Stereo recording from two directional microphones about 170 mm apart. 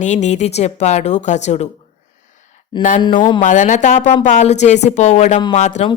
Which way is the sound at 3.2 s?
25° left (ahead or behind).